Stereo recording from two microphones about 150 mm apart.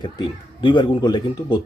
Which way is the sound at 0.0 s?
30° left (ahead or behind).